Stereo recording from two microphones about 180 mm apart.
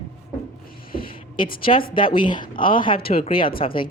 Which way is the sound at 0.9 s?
55° left (ahead or behind).